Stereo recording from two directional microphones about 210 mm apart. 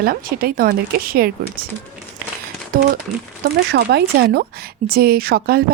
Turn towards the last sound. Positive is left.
turn(degrees=-45)  # may be behind; listen again after turning